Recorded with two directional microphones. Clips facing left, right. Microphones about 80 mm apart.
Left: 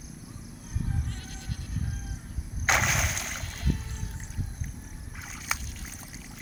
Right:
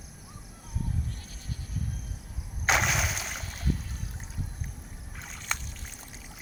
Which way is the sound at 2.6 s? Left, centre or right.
Centre.